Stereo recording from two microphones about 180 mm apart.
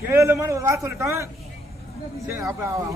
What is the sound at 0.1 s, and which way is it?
Speech, 15° right (ahead or behind).